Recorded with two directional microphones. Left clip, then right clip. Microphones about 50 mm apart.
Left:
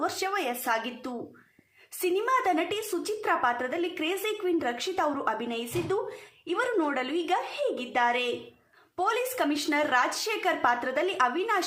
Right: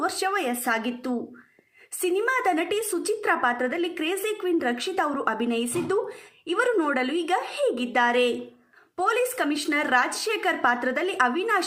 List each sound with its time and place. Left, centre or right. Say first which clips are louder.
0.0 s a woman's voice: right 4 dB; right
2.2 s a woman's voice: right 1 dB; right
11.3 s a woman's voice: right 3 dB; centre